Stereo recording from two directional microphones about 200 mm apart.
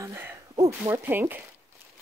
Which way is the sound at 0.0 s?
15° right (ahead or behind).